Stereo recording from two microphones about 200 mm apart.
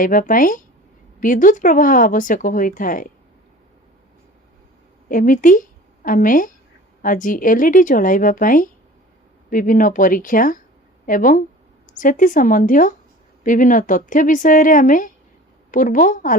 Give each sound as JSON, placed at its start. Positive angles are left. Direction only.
{"t": 0.0, "sound": "speech", "side_deg": 45}
{"t": 5.0, "sound": "a woman's voice", "side_deg": 40}